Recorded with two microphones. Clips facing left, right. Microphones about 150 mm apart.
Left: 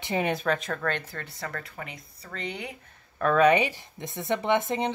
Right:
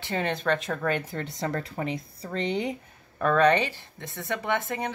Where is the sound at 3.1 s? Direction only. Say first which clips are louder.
Left 1 dB; 5° left (ahead or behind); by 4.9 s 20° left (ahead or behind).